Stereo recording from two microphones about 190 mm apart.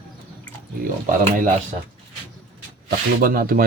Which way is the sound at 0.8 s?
45° right (ahead or behind).